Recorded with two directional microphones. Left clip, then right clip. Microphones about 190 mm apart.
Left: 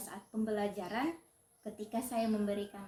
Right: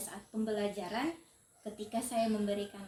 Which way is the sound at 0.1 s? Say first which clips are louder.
Even; 15° right (ahead or behind).